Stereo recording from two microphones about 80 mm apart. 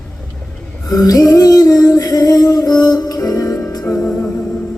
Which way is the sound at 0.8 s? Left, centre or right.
Left.